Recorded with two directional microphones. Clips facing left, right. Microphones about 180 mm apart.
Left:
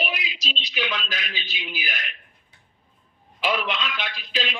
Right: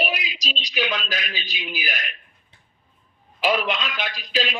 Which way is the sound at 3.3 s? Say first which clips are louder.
Right 3 dB; 45° right (ahead or behind).